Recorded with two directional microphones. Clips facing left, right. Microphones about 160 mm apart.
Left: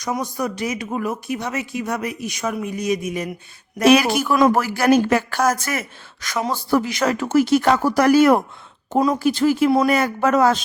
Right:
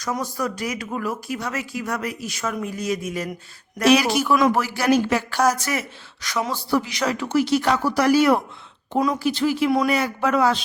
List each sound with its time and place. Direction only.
0.0 s speech: 20° left (ahead or behind)
3.8 s speech: 55° left (ahead or behind)
8.9 s speech: 30° left (ahead or behind)
9.1 s speech: 45° left (ahead or behind)